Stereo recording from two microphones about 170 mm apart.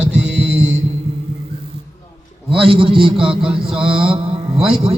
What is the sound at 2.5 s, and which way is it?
Speech, 30° right (ahead or behind).